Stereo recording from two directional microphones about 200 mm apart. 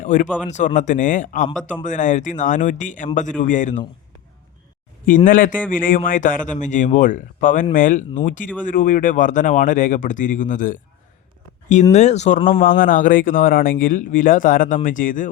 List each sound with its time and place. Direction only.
0.0 s speech: 40° left (ahead or behind)
5.0 s speech: 40° left (ahead or behind)